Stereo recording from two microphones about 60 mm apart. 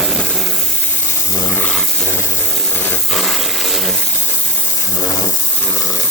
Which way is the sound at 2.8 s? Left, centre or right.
Left.